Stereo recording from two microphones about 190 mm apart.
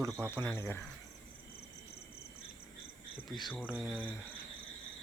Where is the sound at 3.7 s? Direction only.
5° right (ahead or behind).